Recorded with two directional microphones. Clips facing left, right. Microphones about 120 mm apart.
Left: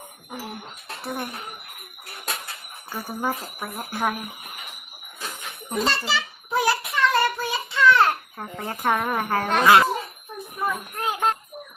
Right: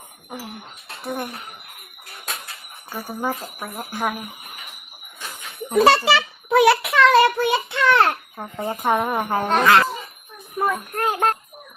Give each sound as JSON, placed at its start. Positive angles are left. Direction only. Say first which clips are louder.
{"t": 2.9, "sound": "speech", "louder": "right 1 dB", "side_deg": -10}
{"t": 5.7, "sound": "a child's voice", "louder": "right 10 dB", "side_deg": -65}
{"t": 6.1, "sound": "child singing", "louder": "right 8 dB", "side_deg": -70}
{"t": 8.4, "sound": "speech", "louder": "right 4 dB", "side_deg": -15}
{"t": 9.6, "sound": "a child's voice", "louder": "left 2 dB", "side_deg": 15}
{"t": 10.6, "sound": "music", "louder": "right 5 dB", "side_deg": -50}